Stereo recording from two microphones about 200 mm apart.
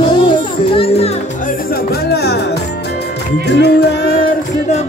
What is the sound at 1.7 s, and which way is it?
Music, 50° left (ahead or behind).